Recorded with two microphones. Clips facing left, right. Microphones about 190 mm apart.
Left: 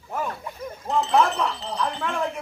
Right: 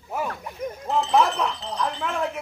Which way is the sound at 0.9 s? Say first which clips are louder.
Even; centre (ahead or behind).